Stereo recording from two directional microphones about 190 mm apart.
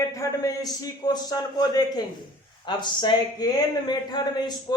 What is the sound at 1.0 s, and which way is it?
Speech, 20° left (ahead or behind).